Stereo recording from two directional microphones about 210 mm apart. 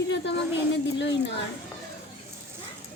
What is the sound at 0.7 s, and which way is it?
Speech, 55° left (ahead or behind).